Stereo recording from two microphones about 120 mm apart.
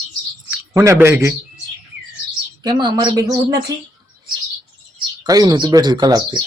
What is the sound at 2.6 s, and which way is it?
Speech, 40° right (ahead or behind).